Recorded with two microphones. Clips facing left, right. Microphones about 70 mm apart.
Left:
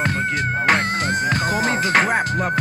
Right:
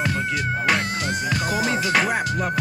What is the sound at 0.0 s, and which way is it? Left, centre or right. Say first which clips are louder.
Music: left 2 dB; left.